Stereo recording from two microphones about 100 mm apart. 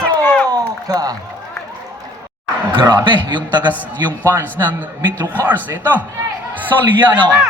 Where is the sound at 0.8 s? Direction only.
40° right (ahead or behind).